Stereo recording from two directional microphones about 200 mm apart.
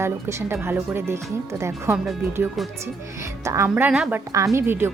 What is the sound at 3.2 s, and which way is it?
A woman's voice, 15° right (ahead or behind).